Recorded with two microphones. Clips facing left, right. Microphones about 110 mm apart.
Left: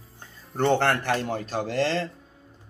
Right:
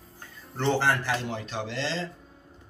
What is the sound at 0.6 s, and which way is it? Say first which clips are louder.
Speech: left 3 dB; 55° left (ahead or behind).